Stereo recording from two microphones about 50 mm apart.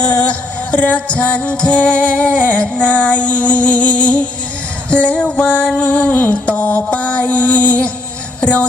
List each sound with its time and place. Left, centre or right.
0.0 s music: left
6.3 s music: left